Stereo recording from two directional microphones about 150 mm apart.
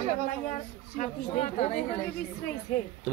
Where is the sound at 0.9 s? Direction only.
50° left (ahead or behind).